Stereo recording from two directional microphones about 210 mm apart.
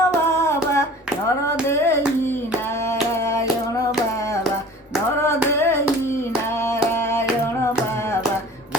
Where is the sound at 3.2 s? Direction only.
15° left (ahead or behind).